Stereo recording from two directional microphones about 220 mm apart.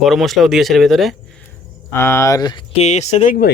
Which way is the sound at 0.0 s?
Centre (ahead or behind).